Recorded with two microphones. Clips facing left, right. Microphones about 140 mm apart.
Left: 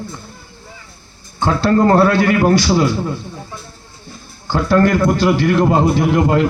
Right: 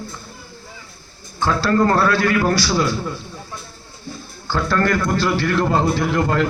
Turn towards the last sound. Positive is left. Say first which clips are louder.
# left 5 dB
turn(degrees=20)  # may be behind; listen again after turning